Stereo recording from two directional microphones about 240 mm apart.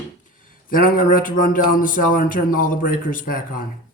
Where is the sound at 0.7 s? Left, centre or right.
Left.